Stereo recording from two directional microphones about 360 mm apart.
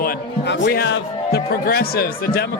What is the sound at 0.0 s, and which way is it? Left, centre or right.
Speech, left.